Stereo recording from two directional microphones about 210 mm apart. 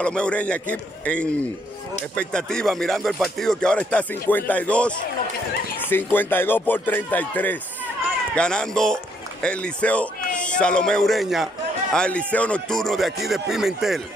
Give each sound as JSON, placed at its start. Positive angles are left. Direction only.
{"t": 0.0, "sound": "speech", "side_deg": 5}
{"t": 6.1, "sound": "a man's voice", "side_deg": 10}